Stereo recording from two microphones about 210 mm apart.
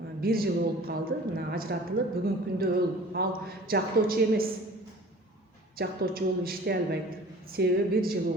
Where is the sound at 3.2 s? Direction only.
45° right (ahead or behind).